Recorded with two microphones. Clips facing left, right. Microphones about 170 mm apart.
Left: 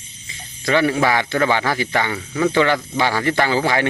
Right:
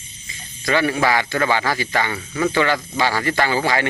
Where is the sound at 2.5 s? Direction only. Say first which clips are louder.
Left 2 dB; 20° left (ahead or behind).